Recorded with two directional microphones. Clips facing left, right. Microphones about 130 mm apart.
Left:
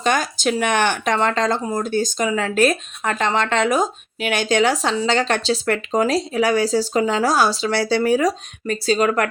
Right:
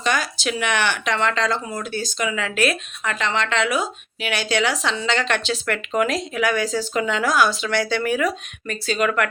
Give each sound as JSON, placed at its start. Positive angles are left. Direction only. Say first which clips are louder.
{"t": 0.0, "sound": "speech", "louder": "left 4 dB", "side_deg": 45}